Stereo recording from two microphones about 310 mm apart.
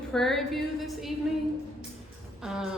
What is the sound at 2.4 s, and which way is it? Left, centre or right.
Speech, centre.